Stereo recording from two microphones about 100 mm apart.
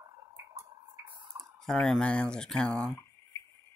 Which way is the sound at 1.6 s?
5° left (ahead or behind).